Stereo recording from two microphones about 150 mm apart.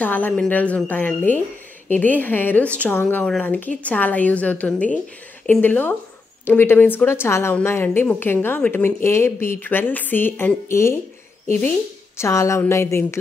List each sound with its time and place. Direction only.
0.0 s a woman's voice: 10° left (ahead or behind)
12.2 s a woman's voice: 20° left (ahead or behind)